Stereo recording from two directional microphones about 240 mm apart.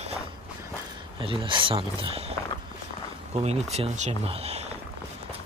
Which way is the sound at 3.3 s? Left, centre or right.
Right.